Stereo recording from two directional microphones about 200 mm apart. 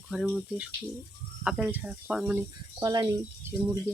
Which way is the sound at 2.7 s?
20° right (ahead or behind).